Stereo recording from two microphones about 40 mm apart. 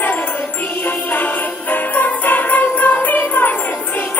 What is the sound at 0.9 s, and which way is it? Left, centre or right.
Jingle bell, left.